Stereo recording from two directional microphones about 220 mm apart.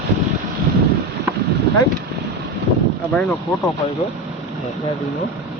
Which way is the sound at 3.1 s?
5° left (ahead or behind).